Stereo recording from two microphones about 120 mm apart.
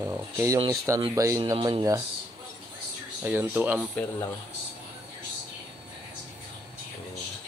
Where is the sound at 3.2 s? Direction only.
15° right (ahead or behind).